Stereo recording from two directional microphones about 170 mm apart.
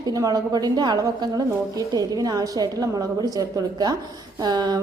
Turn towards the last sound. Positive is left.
turn(degrees=-25)  # may be behind; listen again after turning